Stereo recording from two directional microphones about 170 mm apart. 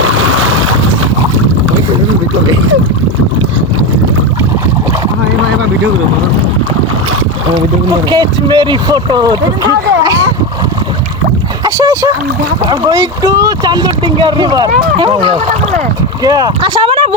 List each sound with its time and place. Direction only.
7.5 s speech: 25° right (ahead or behind)
11.6 s a sound: 20° right (ahead or behind)
12.6 s speech: 25° right (ahead or behind)